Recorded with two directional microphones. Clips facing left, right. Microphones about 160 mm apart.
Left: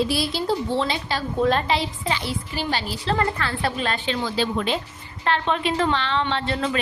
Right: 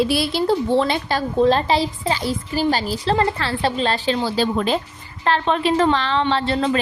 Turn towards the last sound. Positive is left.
turn(degrees=-35)  # may be behind; listen again after turning